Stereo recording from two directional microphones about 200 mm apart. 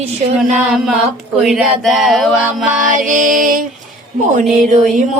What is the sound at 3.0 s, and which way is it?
Speech, 40° right (ahead or behind).